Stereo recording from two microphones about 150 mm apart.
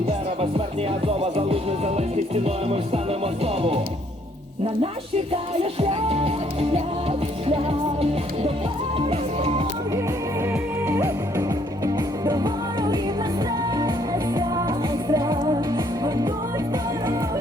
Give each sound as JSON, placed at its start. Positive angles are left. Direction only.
{"t": 1.0, "sound": "music", "side_deg": -40}
{"t": 5.8, "sound": "music", "side_deg": -40}
{"t": 9.0, "sound": "music", "side_deg": -40}
{"t": 10.5, "sound": "music", "side_deg": -15}